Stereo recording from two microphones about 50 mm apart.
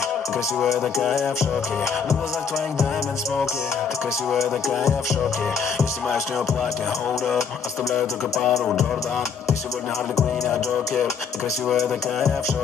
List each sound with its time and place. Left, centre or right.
0.6 s music: centre
4.3 s music: centre
7.9 s music: centre